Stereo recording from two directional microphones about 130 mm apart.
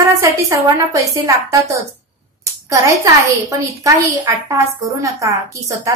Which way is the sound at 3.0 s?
25° right (ahead or behind).